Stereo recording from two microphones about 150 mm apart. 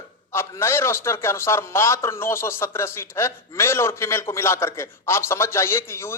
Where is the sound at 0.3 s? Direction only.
15° left (ahead or behind).